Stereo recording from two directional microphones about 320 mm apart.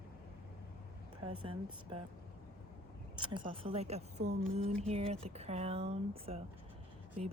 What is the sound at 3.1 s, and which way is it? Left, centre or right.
A woman's voice, centre.